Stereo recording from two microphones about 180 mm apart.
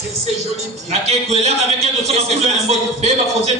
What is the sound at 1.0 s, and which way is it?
Speech, 35° right (ahead or behind).